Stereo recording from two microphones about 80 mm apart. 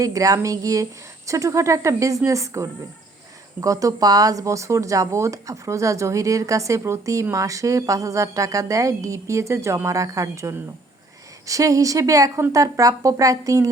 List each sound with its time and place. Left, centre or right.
0.0 s a woman's voice: right